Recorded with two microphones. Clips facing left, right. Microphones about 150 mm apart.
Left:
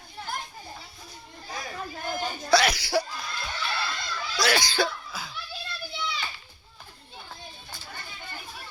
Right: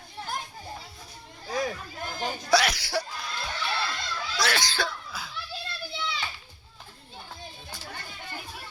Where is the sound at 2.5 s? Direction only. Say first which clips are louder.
Left 2 dB; centre (ahead or behind).